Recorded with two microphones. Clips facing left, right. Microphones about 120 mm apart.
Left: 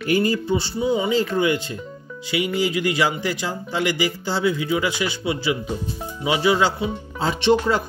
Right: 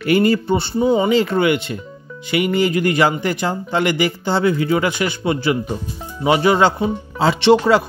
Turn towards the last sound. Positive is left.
turn(degrees=-85)